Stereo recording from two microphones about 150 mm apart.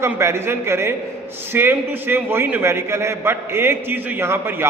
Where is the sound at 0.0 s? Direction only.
15° right (ahead or behind).